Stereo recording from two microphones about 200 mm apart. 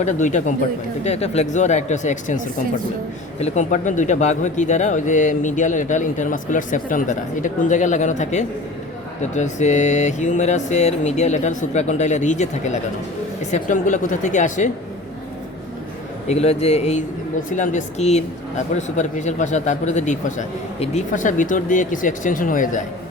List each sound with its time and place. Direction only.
0.0 s speech: 35° left (ahead or behind)
3.4 s speech: 35° left (ahead or behind)
16.3 s speech: 30° left (ahead or behind)